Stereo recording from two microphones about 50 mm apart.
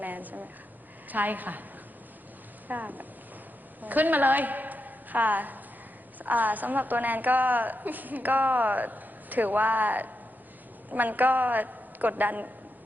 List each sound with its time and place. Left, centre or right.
0.0 s a sound: right
1.1 s a woman's voice: right
2.6 s a woman's voice: right